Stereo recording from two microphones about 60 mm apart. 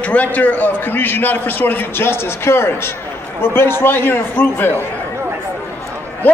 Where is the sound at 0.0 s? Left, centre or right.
Left.